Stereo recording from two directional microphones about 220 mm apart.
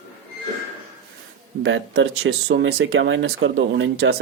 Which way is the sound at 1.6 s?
55° right (ahead or behind).